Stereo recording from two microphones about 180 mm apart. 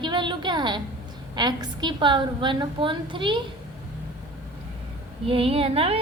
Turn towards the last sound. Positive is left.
turn(degrees=-35)  # may be behind; listen again after turning